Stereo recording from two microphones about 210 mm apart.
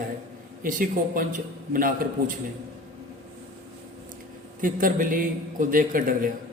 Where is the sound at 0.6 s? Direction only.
40° right (ahead or behind).